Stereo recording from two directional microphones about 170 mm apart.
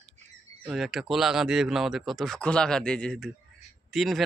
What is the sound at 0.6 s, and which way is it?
Speech, centre (ahead or behind).